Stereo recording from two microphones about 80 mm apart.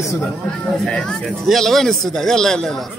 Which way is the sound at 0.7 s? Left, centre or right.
Centre.